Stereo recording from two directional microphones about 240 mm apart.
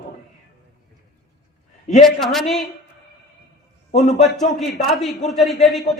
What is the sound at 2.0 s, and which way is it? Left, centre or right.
Speech, centre.